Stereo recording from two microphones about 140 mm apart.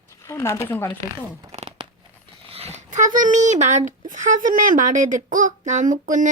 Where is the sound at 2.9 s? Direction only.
65° right (ahead or behind).